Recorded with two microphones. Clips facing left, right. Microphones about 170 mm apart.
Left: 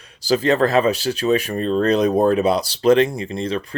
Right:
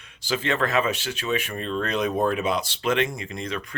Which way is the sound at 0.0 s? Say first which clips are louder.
Left 9 dB; 35° left (ahead or behind).